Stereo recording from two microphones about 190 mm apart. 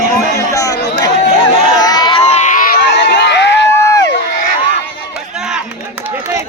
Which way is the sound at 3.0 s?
65° left (ahead or behind).